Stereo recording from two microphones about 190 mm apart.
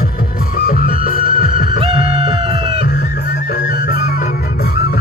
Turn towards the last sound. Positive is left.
turn(degrees=50)  # may be behind; listen again after turning